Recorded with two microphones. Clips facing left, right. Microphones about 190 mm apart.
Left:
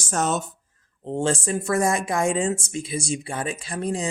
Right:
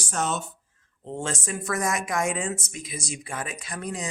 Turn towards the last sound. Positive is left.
turn(degrees=30)  # may be behind; listen again after turning